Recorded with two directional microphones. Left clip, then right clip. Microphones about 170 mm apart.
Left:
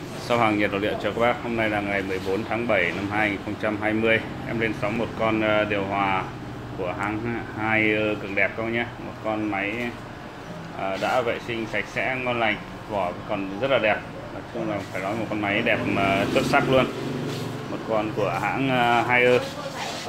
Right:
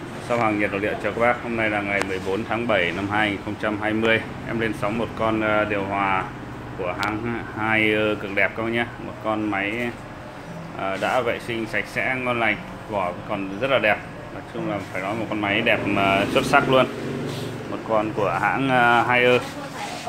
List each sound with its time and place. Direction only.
0.3 s speech: 10° left (ahead or behind)
2.5 s speech: 15° right (ahead or behind)
5.5 s speech: 5° right (ahead or behind); by 16.8 s 20° right (ahead or behind)
17.9 s speech: 10° right (ahead or behind)